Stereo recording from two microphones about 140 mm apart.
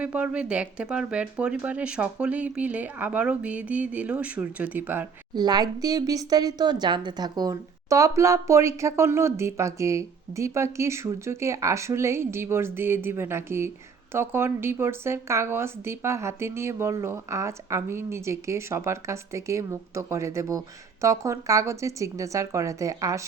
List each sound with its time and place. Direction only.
0.0 s speech: 10° right (ahead or behind)
5.3 s speech: 30° right (ahead or behind)